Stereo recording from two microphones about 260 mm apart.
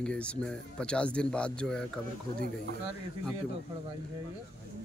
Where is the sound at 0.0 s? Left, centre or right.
Centre.